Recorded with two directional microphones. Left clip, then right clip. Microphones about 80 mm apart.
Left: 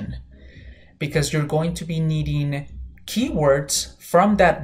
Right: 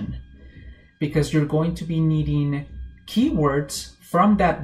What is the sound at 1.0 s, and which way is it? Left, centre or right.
Speech, left.